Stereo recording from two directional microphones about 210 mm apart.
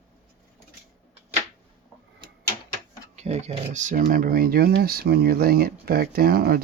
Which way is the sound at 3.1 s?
30° right (ahead or behind).